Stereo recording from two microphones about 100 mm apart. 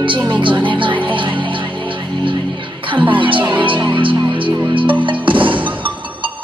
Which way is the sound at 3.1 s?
55° right (ahead or behind).